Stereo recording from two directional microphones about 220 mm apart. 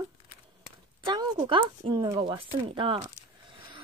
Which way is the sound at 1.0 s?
20° right (ahead or behind).